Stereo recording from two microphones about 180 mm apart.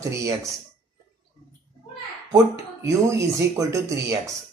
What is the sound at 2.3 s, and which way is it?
Speech, 15° right (ahead or behind).